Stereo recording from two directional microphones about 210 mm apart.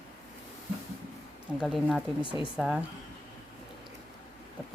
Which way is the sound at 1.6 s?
Centre (ahead or behind).